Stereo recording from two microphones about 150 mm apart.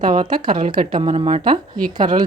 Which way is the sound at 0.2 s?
30° right (ahead or behind).